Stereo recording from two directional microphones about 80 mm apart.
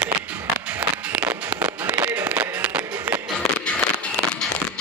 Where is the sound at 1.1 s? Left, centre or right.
Centre.